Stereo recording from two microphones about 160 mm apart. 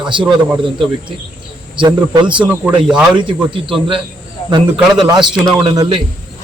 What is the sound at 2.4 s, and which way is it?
Speech, 10° right (ahead or behind).